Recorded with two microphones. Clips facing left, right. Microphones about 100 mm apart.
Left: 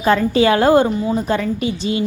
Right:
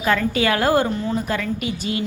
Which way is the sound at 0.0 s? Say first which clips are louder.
Left 5 dB; 30° left (ahead or behind).